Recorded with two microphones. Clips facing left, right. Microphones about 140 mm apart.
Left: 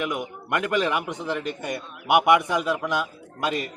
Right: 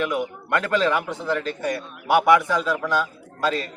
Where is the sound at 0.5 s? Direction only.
15° left (ahead or behind).